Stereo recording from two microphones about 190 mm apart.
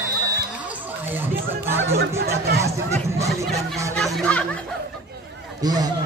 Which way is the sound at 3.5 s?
Centre (ahead or behind).